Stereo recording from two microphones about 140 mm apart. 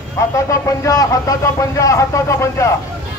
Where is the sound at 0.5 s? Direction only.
25° left (ahead or behind).